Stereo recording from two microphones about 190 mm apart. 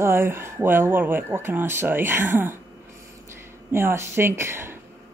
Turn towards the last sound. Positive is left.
turn(degrees=-15)  # may be behind; listen again after turning